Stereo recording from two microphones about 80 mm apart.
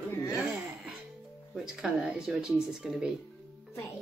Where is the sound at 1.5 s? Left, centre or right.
Centre.